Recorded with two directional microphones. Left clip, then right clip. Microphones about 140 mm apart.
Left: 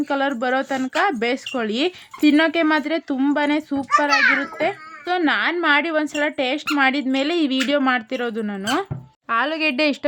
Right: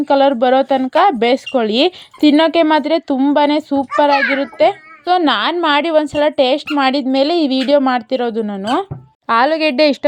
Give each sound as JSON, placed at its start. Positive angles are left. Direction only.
{"t": 0.1, "sound": "a child's voice", "side_deg": -30}